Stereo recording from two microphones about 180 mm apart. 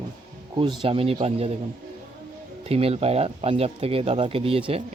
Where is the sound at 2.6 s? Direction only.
35° right (ahead or behind).